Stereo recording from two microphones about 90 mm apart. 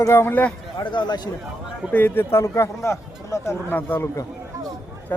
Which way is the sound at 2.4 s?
35° left (ahead or behind).